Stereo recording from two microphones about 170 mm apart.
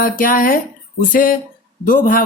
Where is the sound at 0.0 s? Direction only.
55° left (ahead or behind).